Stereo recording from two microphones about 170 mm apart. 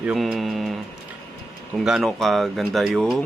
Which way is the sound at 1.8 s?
Centre (ahead or behind).